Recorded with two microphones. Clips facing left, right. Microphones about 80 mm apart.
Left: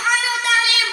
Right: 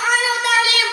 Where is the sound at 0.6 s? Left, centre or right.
Right.